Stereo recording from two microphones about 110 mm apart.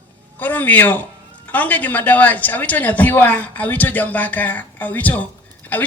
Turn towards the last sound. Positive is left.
turn(degrees=15)  # may be behind; listen again after turning